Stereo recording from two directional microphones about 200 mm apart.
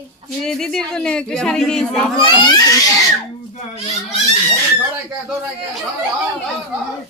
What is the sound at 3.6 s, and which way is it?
Speech, 30° left (ahead or behind).